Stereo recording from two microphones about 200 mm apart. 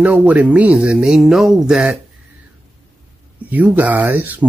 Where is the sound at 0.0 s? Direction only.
5° right (ahead or behind).